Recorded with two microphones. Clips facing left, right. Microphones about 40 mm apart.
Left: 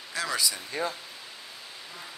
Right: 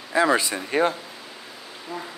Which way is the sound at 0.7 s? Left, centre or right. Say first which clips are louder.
Right 10 dB; right.